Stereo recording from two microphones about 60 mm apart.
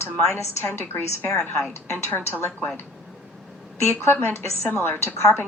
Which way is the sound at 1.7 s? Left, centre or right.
Left.